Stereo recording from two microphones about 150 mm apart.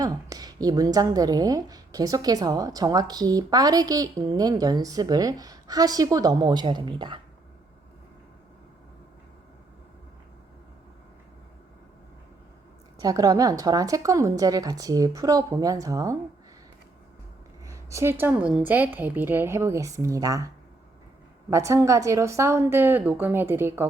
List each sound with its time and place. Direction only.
0.0 s a woman's voice: 25° right (ahead or behind)
13.0 s a woman's voice: 25° right (ahead or behind)
17.7 s a woman's voice: 20° right (ahead or behind)
21.5 s a woman's voice: 20° right (ahead or behind)